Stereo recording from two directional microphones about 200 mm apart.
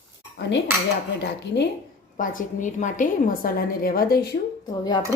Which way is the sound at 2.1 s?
40° left (ahead or behind).